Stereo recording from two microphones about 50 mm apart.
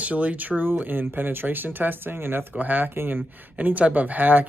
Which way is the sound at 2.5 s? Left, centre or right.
Right.